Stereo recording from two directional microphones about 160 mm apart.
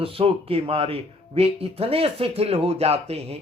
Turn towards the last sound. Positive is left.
turn(degrees=-40)  # may be behind; listen again after turning